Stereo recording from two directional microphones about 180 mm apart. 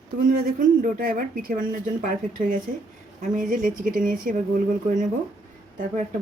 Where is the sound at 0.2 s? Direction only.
50° right (ahead or behind).